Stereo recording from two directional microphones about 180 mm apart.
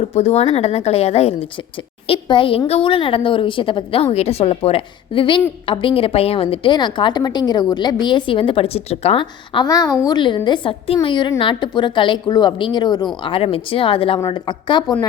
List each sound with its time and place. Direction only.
0.0 s a woman's voice: 35° left (ahead or behind)